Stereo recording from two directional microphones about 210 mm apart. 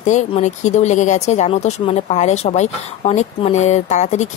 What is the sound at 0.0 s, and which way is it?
Speech, 35° left (ahead or behind).